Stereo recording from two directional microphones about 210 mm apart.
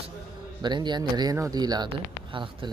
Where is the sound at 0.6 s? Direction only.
20° right (ahead or behind).